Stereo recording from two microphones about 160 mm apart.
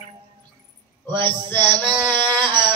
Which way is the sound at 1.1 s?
30° right (ahead or behind).